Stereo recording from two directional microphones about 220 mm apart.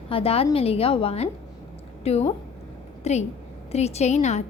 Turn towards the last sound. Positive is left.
turn(degrees=30)  # may be behind; listen again after turning